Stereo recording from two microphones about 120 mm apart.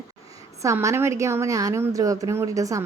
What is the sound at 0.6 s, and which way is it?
A woman's voice, 25° right (ahead or behind).